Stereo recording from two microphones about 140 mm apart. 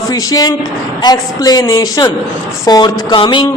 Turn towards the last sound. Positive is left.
turn(degrees=35)  # may be behind; listen again after turning